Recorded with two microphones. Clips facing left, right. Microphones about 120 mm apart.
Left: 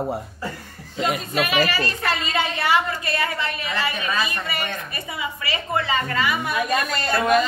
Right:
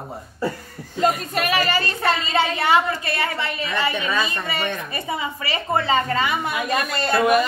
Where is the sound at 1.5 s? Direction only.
30° right (ahead or behind).